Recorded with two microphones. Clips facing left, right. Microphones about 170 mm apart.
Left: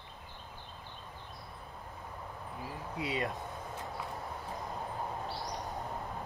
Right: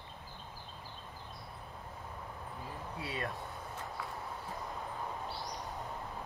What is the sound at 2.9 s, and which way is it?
Speech, 20° left (ahead or behind).